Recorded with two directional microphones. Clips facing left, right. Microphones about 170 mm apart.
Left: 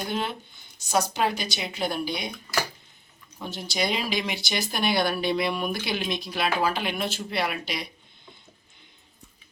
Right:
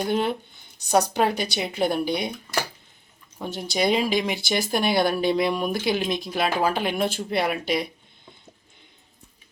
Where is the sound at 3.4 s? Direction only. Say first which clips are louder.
Right 5 dB; 50° right (ahead or behind).